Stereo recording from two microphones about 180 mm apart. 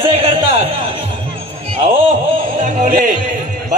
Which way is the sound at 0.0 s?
30° right (ahead or behind).